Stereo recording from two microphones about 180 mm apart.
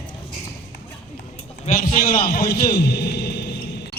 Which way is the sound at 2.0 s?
55° left (ahead or behind).